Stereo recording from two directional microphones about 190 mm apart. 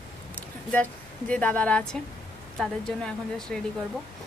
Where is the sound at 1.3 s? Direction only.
5° left (ahead or behind).